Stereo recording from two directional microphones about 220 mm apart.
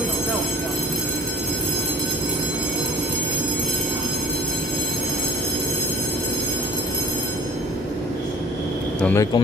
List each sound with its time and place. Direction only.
9.0 s speech: 15° left (ahead or behind)